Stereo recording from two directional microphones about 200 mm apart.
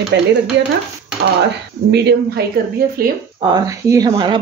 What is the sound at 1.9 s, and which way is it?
Speech, 55° right (ahead or behind).